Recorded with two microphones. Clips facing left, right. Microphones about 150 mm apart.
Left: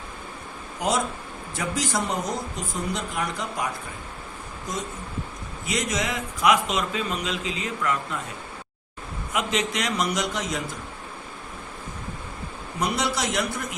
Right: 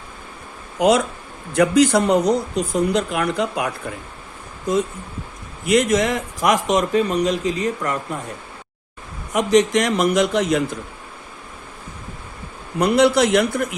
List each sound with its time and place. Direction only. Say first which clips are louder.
0.8 s speech: right 9 dB; 70° right (ahead or behind)
5.6 s speech: right 11 dB; 55° right (ahead or behind)
9.3 s speech: right 11 dB; 40° right (ahead or behind); by 10.6 s 60° right (ahead or behind)
12.8 s a man's voice: right 11 dB; 60° right (ahead or behind)